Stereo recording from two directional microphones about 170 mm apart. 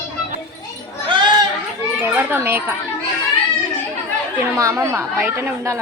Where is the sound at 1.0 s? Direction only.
30° right (ahead or behind).